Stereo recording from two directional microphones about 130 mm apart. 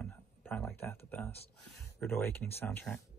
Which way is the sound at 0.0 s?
10° left (ahead or behind).